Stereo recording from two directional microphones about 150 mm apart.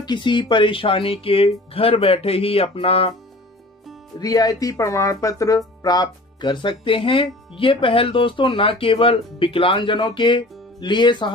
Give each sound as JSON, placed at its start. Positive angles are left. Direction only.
{"t": 0.0, "sound": "speech", "side_deg": 30}
{"t": 4.2, "sound": "speech", "side_deg": 25}